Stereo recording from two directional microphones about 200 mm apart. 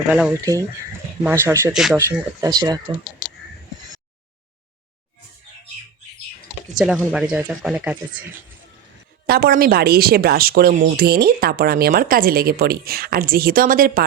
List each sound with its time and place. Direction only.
1.2 s speech: 15° right (ahead or behind)
6.7 s speech: 5° right (ahead or behind)
9.2 s speech: 50° right (ahead or behind)